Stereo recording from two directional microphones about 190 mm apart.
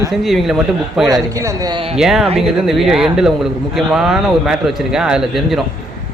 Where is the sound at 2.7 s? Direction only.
Centre (ahead or behind).